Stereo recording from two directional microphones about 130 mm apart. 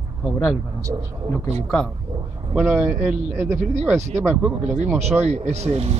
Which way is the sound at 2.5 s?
10° right (ahead or behind).